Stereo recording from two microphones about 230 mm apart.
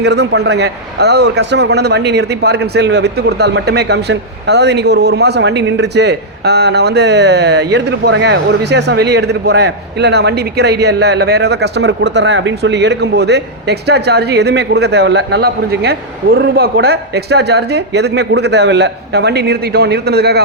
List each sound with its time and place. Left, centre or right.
0.0 s a man's voice: right